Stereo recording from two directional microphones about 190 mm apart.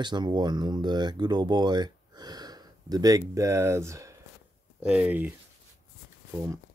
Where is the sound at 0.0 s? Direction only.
20° right (ahead or behind).